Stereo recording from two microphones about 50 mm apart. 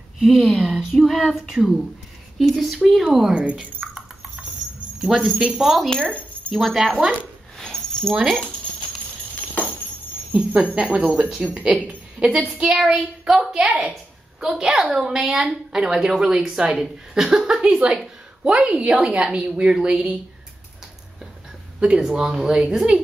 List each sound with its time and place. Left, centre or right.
0.2 s speech: centre
1.5 s a woman's voice: centre
2.3 s speech: centre
3.3 s a woman's voice: right
3.8 s a sound: centre
5.0 s a woman's voice: centre
5.9 s speech: centre
6.5 s speech: centre
6.8 s a woman's voice: centre
7.5 s a sound: centre
10.3 s a woman's voice: right
12.8 s a woman's voice: centre
21.7 s a woman's voice: centre